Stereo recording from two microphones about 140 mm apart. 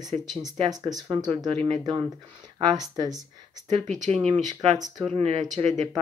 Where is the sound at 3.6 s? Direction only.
55° right (ahead or behind).